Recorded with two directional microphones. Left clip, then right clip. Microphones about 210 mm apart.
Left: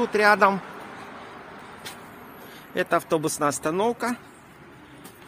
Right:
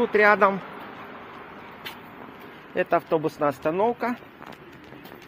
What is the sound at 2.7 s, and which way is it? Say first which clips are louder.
Speech: even; 25° left (ahead or behind).